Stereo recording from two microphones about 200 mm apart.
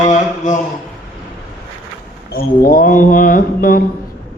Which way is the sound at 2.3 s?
45° left (ahead or behind).